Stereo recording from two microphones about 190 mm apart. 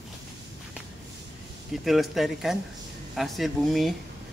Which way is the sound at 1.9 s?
Centre (ahead or behind).